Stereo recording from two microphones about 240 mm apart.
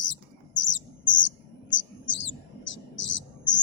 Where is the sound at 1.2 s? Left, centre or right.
Left.